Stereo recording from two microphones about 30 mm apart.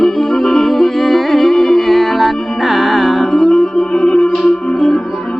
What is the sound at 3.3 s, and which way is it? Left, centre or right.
Music, centre.